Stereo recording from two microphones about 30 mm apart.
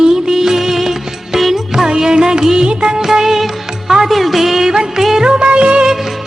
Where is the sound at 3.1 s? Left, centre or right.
Centre.